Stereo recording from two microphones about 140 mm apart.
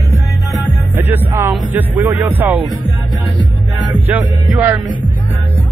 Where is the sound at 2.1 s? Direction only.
15° right (ahead or behind).